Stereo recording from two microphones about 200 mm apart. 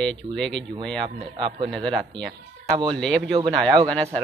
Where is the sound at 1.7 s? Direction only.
5° left (ahead or behind).